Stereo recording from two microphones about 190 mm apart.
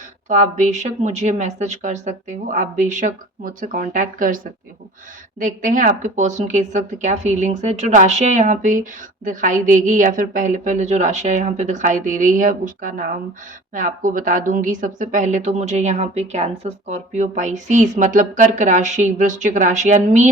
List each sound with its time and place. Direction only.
0.3 s speech: 40° right (ahead or behind)
5.4 s speech: 45° right (ahead or behind)